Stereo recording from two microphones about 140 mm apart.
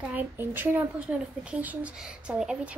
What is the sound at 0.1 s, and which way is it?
Speech, 15° right (ahead or behind).